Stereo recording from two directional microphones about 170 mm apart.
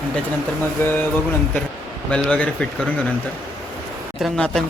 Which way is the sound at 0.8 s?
15° left (ahead or behind).